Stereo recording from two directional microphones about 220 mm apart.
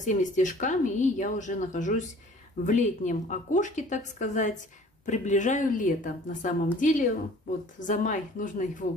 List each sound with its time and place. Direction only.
0.0 s speech: 35° left (ahead or behind)